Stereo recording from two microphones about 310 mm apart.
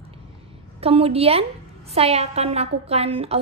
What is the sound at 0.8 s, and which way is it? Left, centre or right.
A woman's voice, centre.